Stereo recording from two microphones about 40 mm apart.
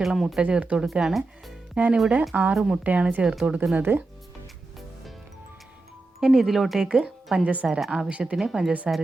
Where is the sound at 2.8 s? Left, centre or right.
Right.